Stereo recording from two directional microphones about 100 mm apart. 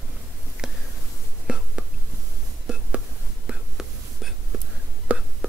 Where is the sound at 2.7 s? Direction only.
10° right (ahead or behind).